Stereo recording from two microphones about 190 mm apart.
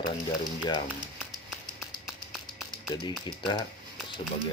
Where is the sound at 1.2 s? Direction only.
Centre (ahead or behind).